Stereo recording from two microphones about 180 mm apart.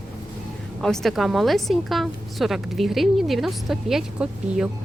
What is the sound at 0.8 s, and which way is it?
A woman's voice, centre (ahead or behind).